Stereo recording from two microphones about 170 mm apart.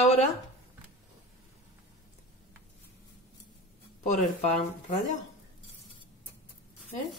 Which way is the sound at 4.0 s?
40° left (ahead or behind).